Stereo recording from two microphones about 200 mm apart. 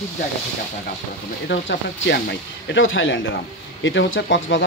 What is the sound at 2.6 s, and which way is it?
Speech, 70° left (ahead or behind).